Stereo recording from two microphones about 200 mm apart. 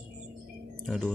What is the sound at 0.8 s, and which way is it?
Speech, centre (ahead or behind).